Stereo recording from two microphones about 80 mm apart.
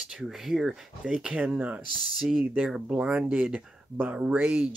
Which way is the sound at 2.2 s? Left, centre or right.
Centre.